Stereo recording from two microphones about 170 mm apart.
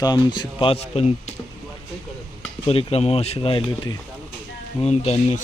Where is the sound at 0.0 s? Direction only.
25° left (ahead or behind).